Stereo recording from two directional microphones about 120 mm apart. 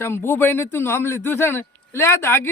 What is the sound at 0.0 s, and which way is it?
A man's voice, 20° left (ahead or behind).